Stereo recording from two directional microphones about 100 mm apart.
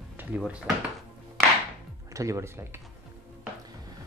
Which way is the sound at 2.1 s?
30° right (ahead or behind).